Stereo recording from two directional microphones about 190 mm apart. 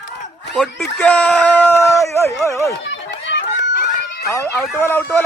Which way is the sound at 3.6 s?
45° left (ahead or behind).